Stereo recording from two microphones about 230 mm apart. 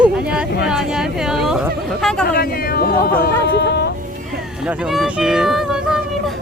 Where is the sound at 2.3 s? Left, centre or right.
Left.